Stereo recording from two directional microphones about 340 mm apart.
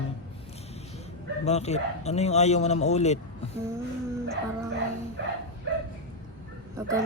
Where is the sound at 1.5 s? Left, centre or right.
Centre.